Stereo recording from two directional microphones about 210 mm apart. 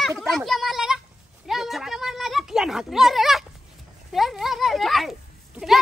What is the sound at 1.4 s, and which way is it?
Speech, centre (ahead or behind).